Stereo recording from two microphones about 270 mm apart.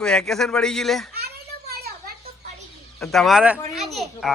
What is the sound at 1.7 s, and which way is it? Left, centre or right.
Children playing, right.